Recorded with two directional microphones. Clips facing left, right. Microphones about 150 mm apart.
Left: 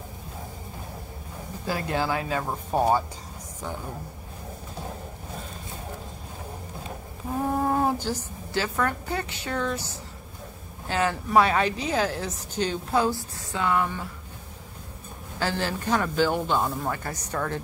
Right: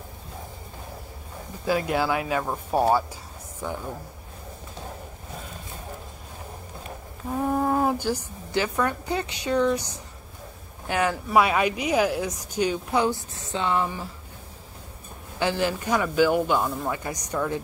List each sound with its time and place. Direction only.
1.7 s a woman's voice: 15° right (ahead or behind)
7.5 s a sound: 5° left (ahead or behind)
8.0 s a woman's voice: 15° right (ahead or behind)
15.3 s a woman's voice: 15° right (ahead or behind)
16.5 s speech: 5° left (ahead or behind)
16.9 s a woman's voice: 15° right (ahead or behind)